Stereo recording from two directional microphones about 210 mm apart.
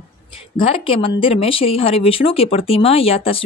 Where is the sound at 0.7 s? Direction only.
25° left (ahead or behind).